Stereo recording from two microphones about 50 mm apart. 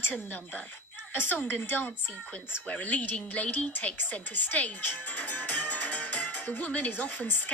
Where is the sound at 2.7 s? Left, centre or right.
Left.